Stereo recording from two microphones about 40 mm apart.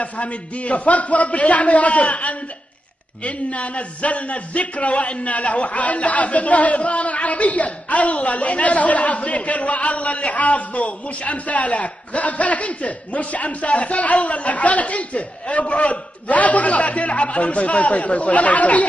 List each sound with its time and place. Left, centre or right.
0.0 s speech: left